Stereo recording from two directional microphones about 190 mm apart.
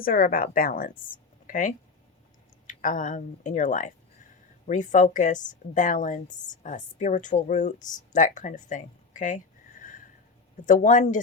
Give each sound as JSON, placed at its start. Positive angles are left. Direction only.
{"t": 0.0, "sound": "a woman's voice", "side_deg": 45}